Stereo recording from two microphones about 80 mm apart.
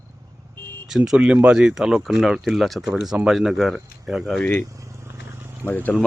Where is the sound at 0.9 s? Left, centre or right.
Centre.